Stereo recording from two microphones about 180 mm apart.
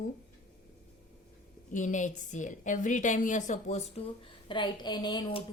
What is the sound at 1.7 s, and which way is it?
A woman's voice, 45° left (ahead or behind).